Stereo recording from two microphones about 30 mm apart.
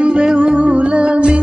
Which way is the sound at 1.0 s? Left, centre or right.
Right.